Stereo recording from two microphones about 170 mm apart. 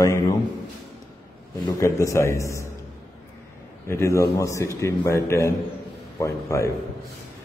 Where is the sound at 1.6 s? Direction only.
20° left (ahead or behind).